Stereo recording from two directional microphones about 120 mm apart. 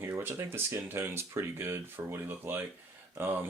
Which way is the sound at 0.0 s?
15° right (ahead or behind).